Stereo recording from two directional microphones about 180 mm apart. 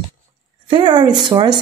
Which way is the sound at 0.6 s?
25° right (ahead or behind).